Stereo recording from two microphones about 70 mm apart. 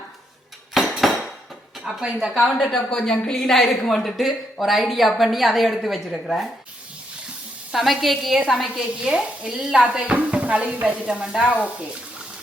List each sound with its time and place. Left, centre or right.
0.8 s a sound: centre
1.8 s a woman's voice: centre
2.5 s a woman's voice: centre
7.7 s sizzle: centre
8.0 s a woman's voice: centre